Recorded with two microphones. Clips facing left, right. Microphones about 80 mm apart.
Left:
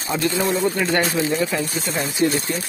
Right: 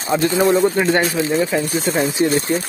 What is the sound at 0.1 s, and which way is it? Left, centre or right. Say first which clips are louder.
Speech: right 6 dB; right.